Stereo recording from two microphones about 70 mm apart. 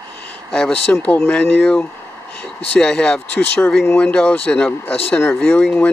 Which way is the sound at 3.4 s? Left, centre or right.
Left.